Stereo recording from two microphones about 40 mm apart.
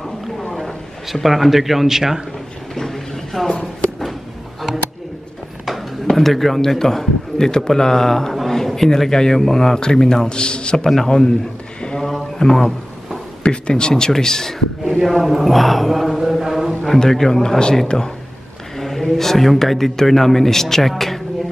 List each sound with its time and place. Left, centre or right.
0.6 s a man's voice: centre
2.7 s a sound: centre
5.7 s music: centre
6.8 s speech: centre
12.2 s a sound: centre
13.4 s a man's voice: left
15.2 s mantra: centre
16.8 s a man's voice: centre
18.8 s a sound: centre
19.1 s speech: centre